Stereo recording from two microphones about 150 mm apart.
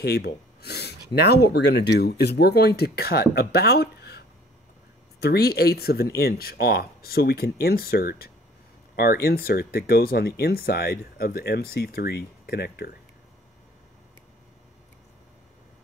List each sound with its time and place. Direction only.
0.0 s speech: 90° left
5.2 s speech: 90° left